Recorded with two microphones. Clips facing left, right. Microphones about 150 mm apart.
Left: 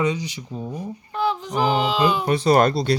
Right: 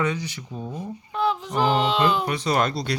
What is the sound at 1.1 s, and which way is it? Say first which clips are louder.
Speech: even; centre (ahead or behind).